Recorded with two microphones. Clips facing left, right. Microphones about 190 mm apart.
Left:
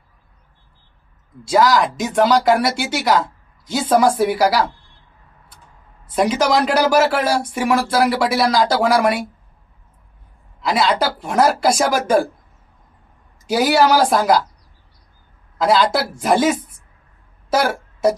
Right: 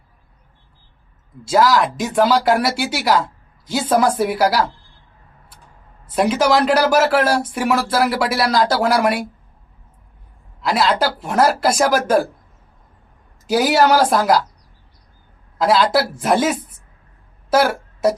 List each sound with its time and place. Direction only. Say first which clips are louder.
1.5 s speech: even; centre (ahead or behind)
6.4 s speech: right 2 dB; centre (ahead or behind)
10.6 s speech: even; 5° right (ahead or behind)
13.5 s speech: even; centre (ahead or behind)
15.6 s speech: right 1 dB; 5° right (ahead or behind)
17.5 s a sound: right 2 dB; 5° right (ahead or behind)